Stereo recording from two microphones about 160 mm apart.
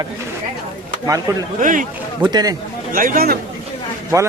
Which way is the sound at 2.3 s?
25° right (ahead or behind).